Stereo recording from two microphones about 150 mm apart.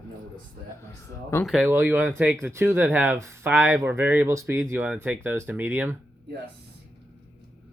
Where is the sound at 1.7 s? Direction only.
10° right (ahead or behind).